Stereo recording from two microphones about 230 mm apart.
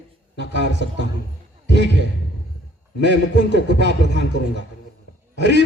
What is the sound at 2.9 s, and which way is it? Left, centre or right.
Speech, left.